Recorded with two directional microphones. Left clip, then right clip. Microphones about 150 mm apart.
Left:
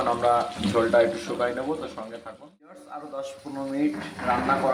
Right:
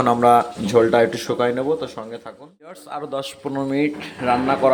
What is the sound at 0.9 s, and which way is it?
Speech, 50° right (ahead or behind).